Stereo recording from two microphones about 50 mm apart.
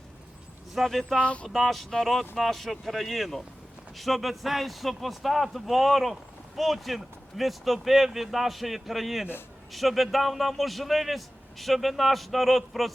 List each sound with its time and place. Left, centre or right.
0.7 s a man's voice: centre
1.2 s speech: left
1.5 s a man's voice: centre